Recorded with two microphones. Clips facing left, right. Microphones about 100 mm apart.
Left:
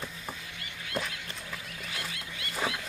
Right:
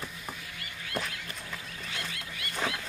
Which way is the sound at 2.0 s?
25° left (ahead or behind).